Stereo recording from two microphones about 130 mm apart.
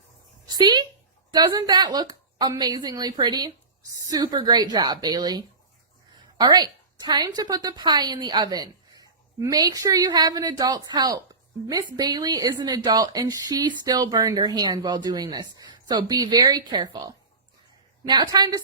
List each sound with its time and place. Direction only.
0.4 s a woman's voice: 35° right (ahead or behind)